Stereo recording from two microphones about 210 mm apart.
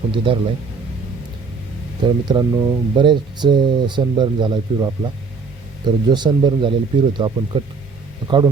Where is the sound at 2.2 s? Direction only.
20° right (ahead or behind).